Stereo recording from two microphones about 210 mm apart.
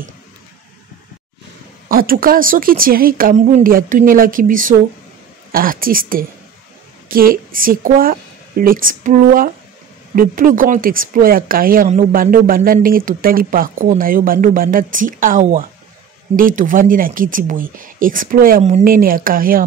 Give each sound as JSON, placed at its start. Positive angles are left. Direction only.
{"t": 1.9, "sound": "speech", "side_deg": -45}